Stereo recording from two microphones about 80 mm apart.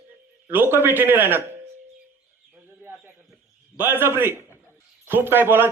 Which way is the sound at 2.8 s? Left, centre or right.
Right.